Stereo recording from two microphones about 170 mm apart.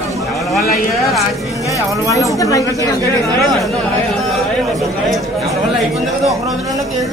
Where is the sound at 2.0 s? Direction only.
20° left (ahead or behind).